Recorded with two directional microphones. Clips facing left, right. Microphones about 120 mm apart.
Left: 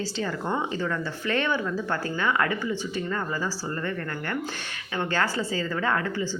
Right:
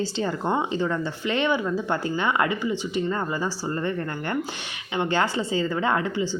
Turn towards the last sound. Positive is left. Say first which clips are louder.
# right 3 dB
turn(degrees=-20)  # may be behind; listen again after turning